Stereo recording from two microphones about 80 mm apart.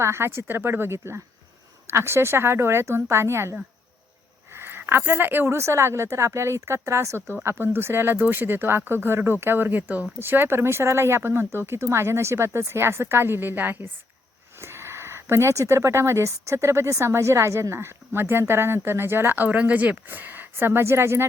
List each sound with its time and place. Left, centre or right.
0.0 s speech: right